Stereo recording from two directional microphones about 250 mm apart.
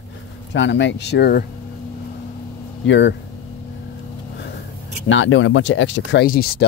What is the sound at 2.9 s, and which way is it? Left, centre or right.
Speech, left.